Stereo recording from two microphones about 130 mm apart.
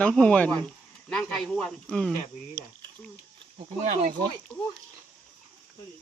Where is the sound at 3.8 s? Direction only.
70° right (ahead or behind).